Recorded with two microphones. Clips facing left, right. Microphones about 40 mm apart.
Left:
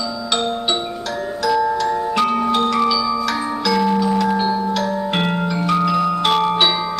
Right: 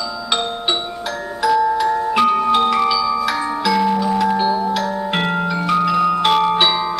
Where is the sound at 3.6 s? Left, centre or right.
Centre.